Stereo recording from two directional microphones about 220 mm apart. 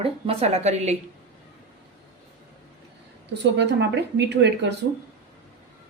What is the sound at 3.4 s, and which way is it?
A woman's voice, 50° right (ahead or behind).